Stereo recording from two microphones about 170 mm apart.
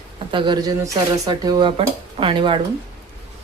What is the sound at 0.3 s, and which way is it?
Speech, 30° right (ahead or behind).